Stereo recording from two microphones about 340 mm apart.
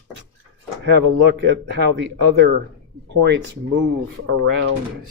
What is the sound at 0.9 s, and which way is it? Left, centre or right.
Speech, right.